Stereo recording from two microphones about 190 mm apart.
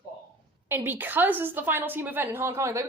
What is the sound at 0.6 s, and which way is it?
A woman's voice, 10° right (ahead or behind).